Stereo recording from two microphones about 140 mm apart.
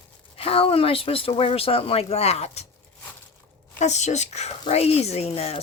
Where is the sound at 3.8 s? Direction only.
55° left (ahead or behind).